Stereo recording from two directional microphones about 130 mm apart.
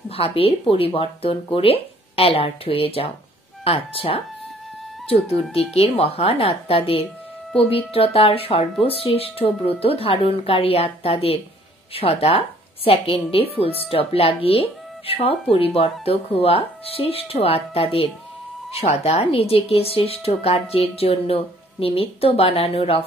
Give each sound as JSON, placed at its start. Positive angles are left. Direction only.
{"t": 0.1, "sound": "speech", "side_deg": 50}